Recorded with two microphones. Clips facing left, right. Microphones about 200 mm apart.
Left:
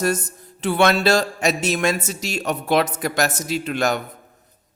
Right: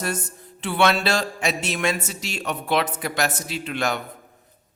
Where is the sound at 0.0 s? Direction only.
40° left (ahead or behind).